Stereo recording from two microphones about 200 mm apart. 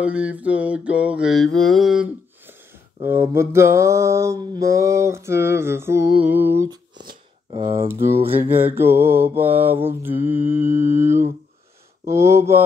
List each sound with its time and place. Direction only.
0.0 s mantra: 5° right (ahead or behind)
7.5 s speech: 25° right (ahead or behind)
7.9 s mantra: 10° right (ahead or behind)
12.1 s mantra: 15° right (ahead or behind)